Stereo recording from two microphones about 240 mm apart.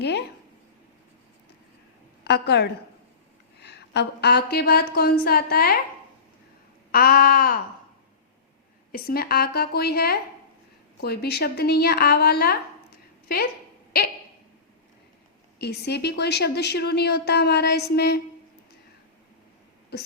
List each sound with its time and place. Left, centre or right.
0.0 s a sound: left
2.2 s a woman's voice: left
6.9 s a woman's voice: left
8.9 s a woman's voice: left
15.5 s a woman's voice: left
19.9 s speech: left